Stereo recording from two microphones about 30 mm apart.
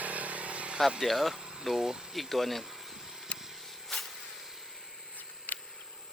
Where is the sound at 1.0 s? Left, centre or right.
Centre.